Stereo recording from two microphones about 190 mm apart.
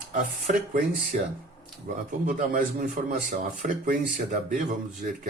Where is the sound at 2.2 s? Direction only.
45° right (ahead or behind).